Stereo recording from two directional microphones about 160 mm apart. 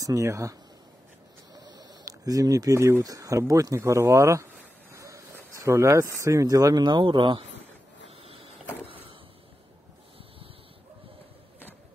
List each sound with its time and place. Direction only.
0.0 s speech: 20° right (ahead or behind)
8.2 s vehicle: 35° right (ahead or behind)